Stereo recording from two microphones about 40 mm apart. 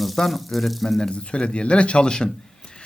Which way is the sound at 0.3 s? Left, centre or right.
Centre.